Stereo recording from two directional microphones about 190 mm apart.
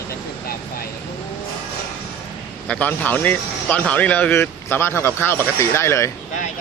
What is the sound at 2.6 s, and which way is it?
Speech, 5° left (ahead or behind).